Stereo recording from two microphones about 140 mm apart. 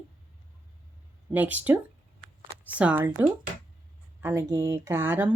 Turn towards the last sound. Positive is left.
turn(degrees=-15)  # may be behind; listen again after turning